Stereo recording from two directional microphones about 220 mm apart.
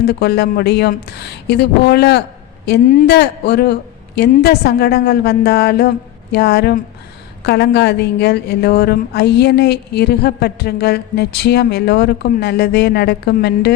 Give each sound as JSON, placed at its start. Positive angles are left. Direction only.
{"t": 0.1, "sound": "a woman's voice", "side_deg": 45}